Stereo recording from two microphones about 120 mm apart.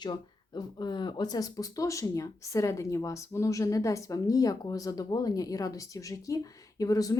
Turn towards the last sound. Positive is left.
turn(degrees=30)  # may be behind; listen again after turning